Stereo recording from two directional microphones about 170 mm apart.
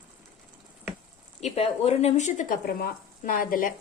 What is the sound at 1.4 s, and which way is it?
Speech, 35° left (ahead or behind).